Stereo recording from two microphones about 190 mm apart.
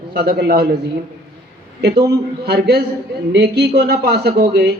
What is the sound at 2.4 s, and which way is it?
Speech, 60° right (ahead or behind).